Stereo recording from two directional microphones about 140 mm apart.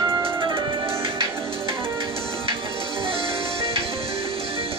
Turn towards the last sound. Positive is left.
turn(degrees=-40)  # may be behind; listen again after turning